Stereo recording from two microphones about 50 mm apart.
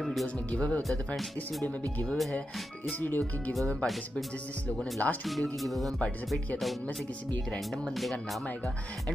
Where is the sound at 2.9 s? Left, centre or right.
Left.